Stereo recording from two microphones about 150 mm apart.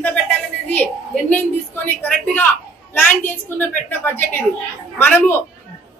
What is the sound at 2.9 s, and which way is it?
A woman's voice, 10° left (ahead or behind).